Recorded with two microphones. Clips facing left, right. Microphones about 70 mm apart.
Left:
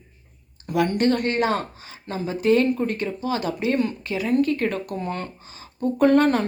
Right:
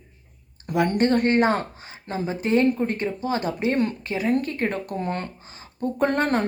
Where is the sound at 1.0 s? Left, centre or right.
Right.